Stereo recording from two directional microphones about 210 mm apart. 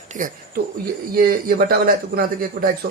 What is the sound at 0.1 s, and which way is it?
A man's voice, 40° right (ahead or behind).